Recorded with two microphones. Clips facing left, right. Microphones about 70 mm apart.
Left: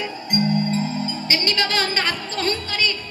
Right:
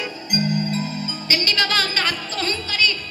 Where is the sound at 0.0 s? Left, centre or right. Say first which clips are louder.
Left 2 dB; left.